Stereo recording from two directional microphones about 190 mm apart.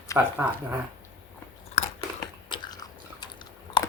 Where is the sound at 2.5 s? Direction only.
20° left (ahead or behind).